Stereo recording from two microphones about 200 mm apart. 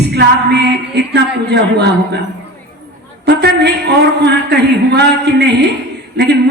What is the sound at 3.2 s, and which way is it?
A woman's voice, 55° right (ahead or behind).